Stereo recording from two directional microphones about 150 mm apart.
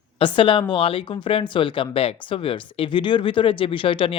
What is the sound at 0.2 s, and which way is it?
Speech, 35° left (ahead or behind).